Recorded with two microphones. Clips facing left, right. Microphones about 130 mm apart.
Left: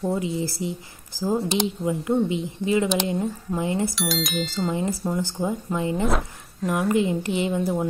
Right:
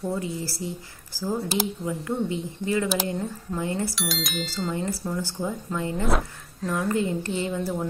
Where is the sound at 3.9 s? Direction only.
Centre (ahead or behind).